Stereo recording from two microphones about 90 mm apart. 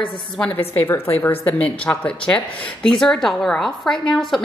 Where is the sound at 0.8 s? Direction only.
25° left (ahead or behind); by 4.4 s 5° left (ahead or behind).